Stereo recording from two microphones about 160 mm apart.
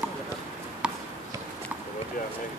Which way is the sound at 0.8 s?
5° right (ahead or behind).